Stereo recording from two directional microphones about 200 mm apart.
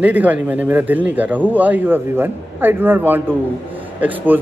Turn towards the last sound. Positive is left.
turn(degrees=-10)  # may be behind; listen again after turning